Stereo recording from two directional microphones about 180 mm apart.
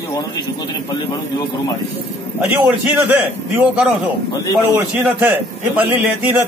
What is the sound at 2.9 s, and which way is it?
Speech, 10° right (ahead or behind).